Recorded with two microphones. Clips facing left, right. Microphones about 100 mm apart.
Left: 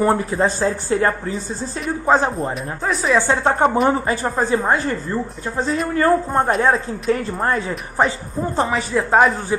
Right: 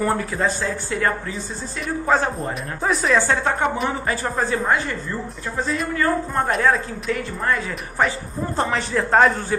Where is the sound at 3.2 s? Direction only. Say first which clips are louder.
Left 4 dB; 20° left (ahead or behind).